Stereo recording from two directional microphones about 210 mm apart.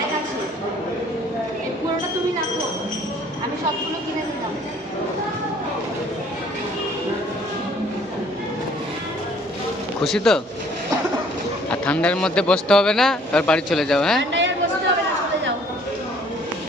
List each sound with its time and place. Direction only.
10.0 s a man's voice: centre (ahead or behind)
11.7 s a man's voice: 5° left (ahead or behind)
14.2 s chatter: 60° right (ahead or behind)